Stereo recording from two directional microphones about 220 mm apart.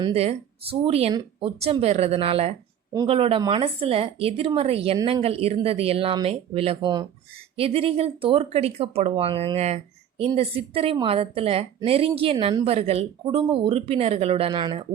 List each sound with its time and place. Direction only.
0.0 s speech: 25° right (ahead or behind)